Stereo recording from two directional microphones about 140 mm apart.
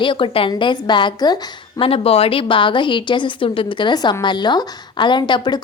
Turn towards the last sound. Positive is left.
turn(degrees=35)  # may be behind; listen again after turning